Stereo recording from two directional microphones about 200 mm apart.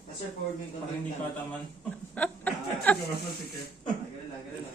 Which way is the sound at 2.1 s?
5° left (ahead or behind).